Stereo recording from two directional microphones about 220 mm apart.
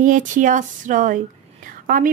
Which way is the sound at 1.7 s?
40° right (ahead or behind).